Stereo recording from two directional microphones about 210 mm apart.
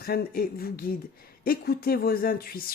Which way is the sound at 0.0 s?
45° left (ahead or behind).